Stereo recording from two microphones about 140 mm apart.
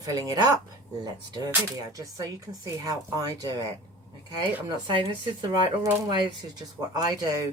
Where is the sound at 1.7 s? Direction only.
25° right (ahead or behind).